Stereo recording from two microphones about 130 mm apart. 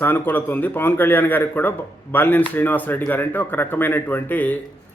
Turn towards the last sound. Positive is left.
turn(degrees=15)  # may be behind; listen again after turning